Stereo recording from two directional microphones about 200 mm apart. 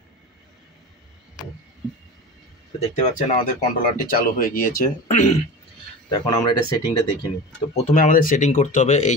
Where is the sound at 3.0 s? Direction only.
35° left (ahead or behind).